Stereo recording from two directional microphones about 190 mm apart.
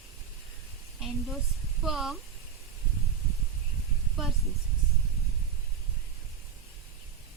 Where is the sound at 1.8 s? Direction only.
Centre (ahead or behind).